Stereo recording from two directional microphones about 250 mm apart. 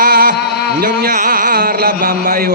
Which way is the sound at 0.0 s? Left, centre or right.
Right.